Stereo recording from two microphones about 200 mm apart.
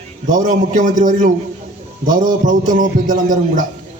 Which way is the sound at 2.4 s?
40° right (ahead or behind).